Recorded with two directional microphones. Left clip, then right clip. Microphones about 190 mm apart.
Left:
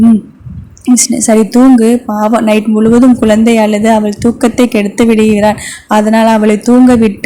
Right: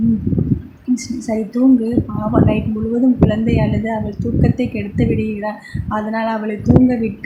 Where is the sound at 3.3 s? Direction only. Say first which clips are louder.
Left 11 dB; 55° left (ahead or behind).